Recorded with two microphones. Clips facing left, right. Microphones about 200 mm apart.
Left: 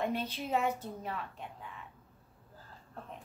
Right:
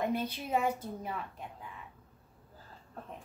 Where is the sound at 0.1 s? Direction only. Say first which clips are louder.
Right 1 dB; 10° right (ahead or behind).